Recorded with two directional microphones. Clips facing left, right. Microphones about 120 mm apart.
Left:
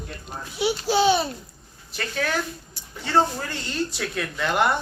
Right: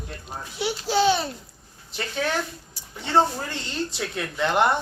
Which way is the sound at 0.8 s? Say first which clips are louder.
Even; 10° left (ahead or behind).